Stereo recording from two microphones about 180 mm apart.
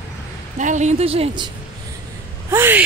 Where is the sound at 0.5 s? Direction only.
40° right (ahead or behind).